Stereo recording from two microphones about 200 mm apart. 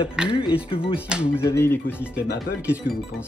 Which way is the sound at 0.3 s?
25° left (ahead or behind).